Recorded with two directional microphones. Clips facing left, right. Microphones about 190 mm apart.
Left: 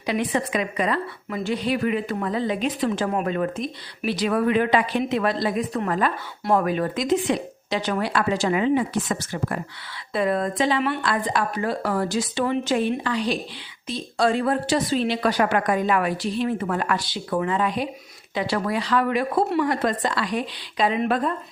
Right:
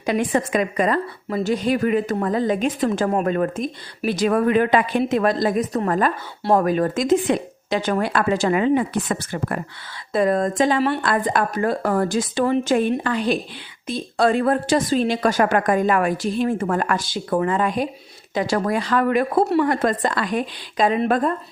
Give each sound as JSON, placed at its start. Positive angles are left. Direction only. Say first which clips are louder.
{"t": 0.0, "sound": "a woman's voice", "louder": "right 3 dB", "side_deg": -45}
{"t": 10.1, "sound": "a woman's voice", "louder": "right 4 dB", "side_deg": -45}